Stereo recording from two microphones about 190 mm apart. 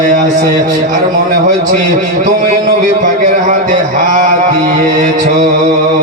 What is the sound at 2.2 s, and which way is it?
A man's voice, 45° right (ahead or behind).